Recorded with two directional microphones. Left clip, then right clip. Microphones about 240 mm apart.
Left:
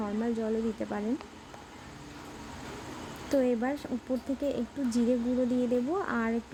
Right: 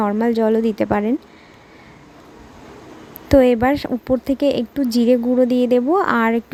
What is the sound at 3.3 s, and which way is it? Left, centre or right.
Speech, right.